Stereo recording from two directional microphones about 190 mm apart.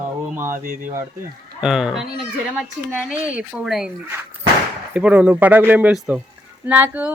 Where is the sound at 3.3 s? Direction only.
5° right (ahead or behind).